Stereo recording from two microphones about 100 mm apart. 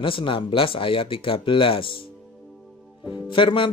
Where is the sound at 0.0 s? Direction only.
60° left (ahead or behind).